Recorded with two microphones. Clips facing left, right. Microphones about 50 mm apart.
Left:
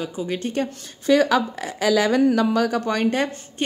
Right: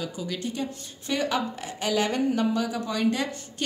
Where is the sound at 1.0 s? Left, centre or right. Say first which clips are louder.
Left 9 dB; left.